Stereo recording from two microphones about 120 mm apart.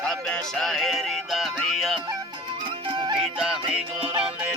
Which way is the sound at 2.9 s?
40° right (ahead or behind).